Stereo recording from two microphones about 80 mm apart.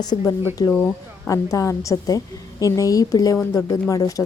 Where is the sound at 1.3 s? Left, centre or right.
Left.